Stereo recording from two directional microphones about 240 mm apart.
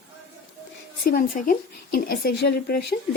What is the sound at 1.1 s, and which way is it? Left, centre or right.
Speech, left.